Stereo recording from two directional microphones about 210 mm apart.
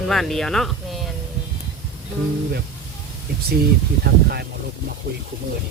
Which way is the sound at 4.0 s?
50° right (ahead or behind).